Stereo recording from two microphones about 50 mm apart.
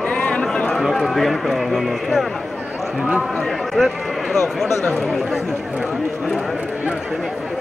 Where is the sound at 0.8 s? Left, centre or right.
Centre.